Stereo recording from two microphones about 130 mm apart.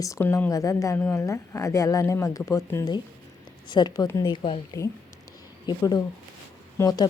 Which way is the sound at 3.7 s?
35° left (ahead or behind).